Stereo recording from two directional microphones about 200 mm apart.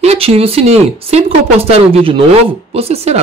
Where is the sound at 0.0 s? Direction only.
30° right (ahead or behind).